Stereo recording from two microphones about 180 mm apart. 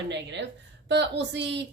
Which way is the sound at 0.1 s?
75° right (ahead or behind).